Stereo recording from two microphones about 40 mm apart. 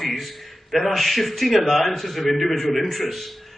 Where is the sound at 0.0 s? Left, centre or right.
Centre.